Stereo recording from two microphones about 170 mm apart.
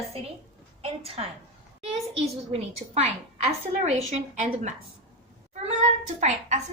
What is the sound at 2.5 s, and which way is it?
A woman's voice, 40° right (ahead or behind).